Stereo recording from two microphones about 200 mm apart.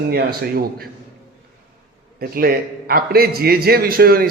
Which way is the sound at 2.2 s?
50° right (ahead or behind).